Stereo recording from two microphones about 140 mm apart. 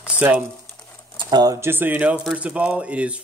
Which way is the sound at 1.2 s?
30° right (ahead or behind).